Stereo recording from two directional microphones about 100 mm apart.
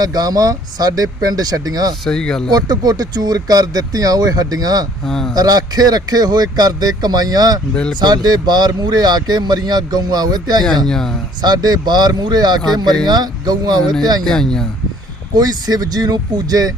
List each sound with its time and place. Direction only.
0.0 s speech: 40° right (ahead or behind)
2.0 s speech: 5° left (ahead or behind)
2.5 s speech: 40° right (ahead or behind)
5.0 s speech: 5° left (ahead or behind)
5.3 s speech: 40° right (ahead or behind)
10.8 s speech: 5° left (ahead or behind)
11.4 s speech: 45° right (ahead or behind)
14.3 s speech: 5° left (ahead or behind)
15.4 s speech: 40° right (ahead or behind)